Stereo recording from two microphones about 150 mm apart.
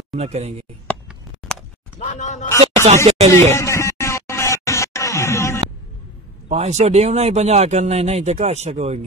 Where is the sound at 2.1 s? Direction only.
55° left (ahead or behind).